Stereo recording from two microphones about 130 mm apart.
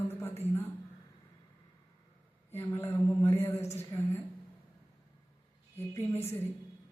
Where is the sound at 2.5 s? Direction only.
20° left (ahead or behind).